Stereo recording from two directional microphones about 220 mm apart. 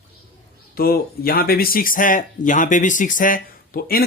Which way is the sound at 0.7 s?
45° left (ahead or behind).